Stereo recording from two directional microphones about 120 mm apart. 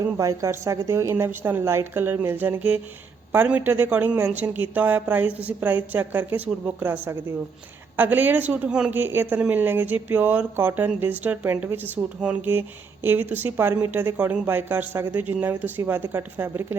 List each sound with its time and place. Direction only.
0.0 s a woman's voice: 25° right (ahead or behind)